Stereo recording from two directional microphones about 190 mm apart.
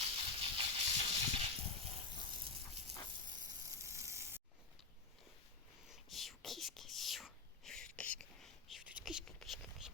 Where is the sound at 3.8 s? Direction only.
15° right (ahead or behind).